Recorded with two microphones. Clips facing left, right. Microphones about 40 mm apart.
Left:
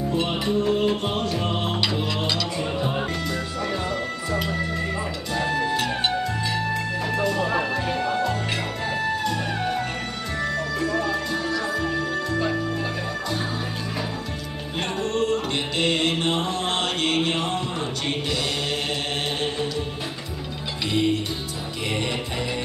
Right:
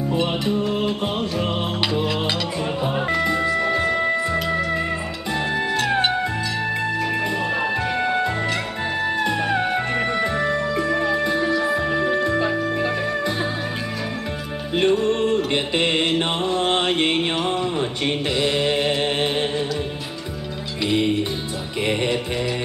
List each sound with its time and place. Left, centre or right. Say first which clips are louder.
0.1 s music: right 2 dB; centre
3.2 s music: right 8 dB; right
7.2 s music: right 1 dB; right
14.8 s music: right 6 dB; right